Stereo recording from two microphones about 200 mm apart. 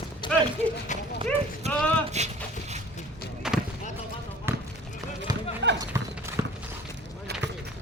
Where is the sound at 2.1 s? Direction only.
35° right (ahead or behind).